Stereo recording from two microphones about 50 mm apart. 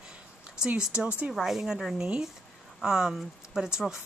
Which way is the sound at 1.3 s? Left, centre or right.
Centre.